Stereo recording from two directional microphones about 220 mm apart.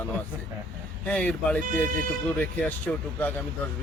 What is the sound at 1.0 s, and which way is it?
Speech, 5° left (ahead or behind).